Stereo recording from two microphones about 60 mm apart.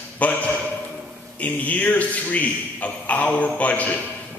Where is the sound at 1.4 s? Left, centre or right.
Left.